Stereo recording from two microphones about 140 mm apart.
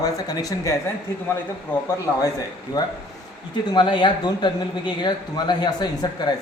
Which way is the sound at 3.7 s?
35° left (ahead or behind).